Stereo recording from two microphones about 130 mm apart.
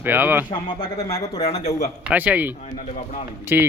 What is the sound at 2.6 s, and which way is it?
Speech, 55° left (ahead or behind).